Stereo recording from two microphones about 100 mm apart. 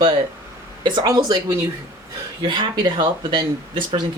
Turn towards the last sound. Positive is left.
turn(degrees=-50)  # may be behind; listen again after turning